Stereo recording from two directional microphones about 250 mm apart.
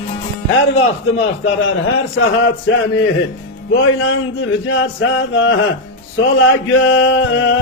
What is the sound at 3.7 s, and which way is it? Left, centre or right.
Speech, left.